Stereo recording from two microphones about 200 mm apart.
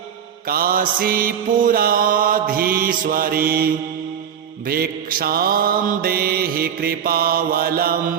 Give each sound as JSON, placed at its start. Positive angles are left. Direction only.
{"t": 0.4, "sound": "mantra", "side_deg": -45}